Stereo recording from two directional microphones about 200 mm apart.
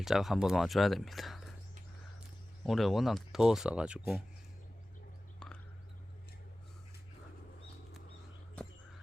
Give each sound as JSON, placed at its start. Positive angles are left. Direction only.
{"t": 0.0, "sound": "speech", "side_deg": 0}
{"t": 2.6, "sound": "speech", "side_deg": 0}
{"t": 5.4, "sound": "a sound", "side_deg": 5}